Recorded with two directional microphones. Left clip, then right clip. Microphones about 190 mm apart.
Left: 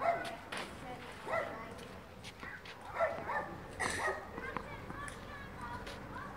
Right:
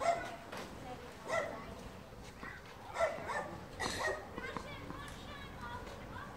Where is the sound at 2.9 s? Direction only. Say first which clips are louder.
Left 1 dB; 55° right (ahead or behind).